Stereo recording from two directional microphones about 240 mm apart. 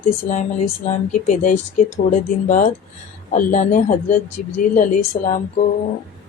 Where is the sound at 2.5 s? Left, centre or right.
Left.